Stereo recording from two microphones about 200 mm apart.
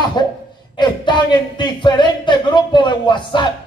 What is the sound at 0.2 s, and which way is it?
Chuckle, 20° left (ahead or behind).